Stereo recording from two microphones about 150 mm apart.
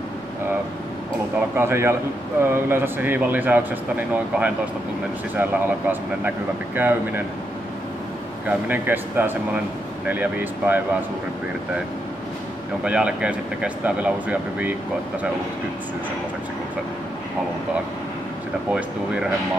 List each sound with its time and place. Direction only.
1.6 s speech: 15° right (ahead or behind)
8.5 s speech: 10° right (ahead or behind)
12.8 s speech: 5° right (ahead or behind)
18.7 s speech: 5° right (ahead or behind)